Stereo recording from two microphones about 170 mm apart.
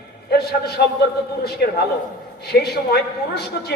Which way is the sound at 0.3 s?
70° left (ahead or behind).